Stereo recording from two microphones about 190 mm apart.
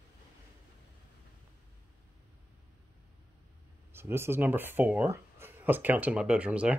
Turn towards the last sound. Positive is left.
turn(degrees=-5)  # may be behind; listen again after turning